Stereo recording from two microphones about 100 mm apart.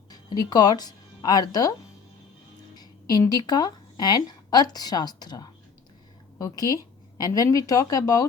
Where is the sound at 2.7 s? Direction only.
40° left (ahead or behind).